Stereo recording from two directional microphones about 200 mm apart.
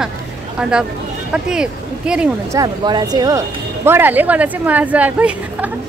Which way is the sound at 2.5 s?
20° right (ahead or behind).